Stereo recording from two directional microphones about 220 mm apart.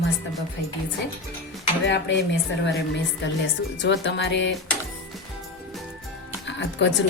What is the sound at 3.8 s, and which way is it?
Speech, 50° left (ahead or behind).